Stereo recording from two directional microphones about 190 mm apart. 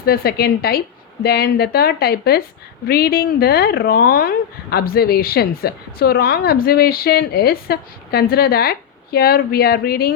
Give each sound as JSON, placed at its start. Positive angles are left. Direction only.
{"t": 0.0, "sound": "speech", "side_deg": 55}